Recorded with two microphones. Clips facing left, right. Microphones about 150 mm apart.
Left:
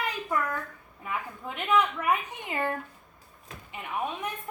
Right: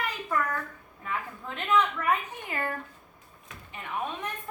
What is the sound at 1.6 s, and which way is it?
A woman's voice, 10° left (ahead or behind).